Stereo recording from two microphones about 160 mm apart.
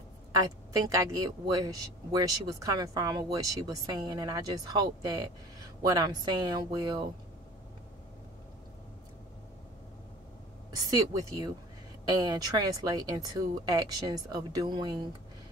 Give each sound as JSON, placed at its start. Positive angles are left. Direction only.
{"t": 0.4, "sound": "speech", "side_deg": -20}
{"t": 10.7, "sound": "speech", "side_deg": -25}